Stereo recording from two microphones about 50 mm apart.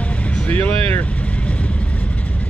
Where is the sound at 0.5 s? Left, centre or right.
Left.